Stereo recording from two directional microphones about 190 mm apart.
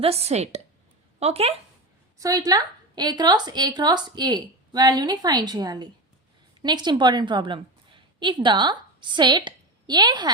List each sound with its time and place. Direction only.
0.0 s a woman's voice: 30° right (ahead or behind)
2.1 s a woman's voice: 20° right (ahead or behind)